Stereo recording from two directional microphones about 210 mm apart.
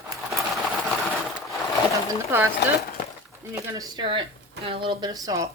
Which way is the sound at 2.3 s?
10° right (ahead or behind).